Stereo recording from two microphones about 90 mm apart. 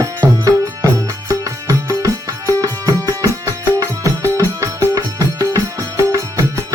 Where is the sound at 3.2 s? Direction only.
35° right (ahead or behind).